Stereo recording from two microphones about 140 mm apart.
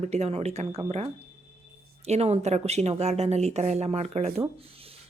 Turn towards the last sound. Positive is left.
turn(degrees=-50)  # may be behind; listen again after turning